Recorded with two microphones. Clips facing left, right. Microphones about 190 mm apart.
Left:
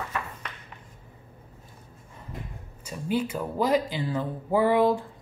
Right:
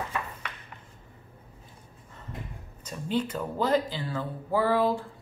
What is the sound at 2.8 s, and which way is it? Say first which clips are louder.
Speech: left 2 dB; 10° left (ahead or behind).